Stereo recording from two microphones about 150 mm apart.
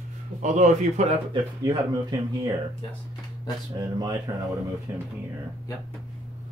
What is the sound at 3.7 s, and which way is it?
Speech, 25° right (ahead or behind).